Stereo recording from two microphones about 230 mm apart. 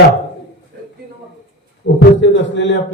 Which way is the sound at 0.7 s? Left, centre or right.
Right.